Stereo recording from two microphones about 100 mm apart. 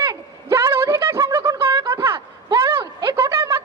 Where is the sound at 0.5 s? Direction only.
25° right (ahead or behind).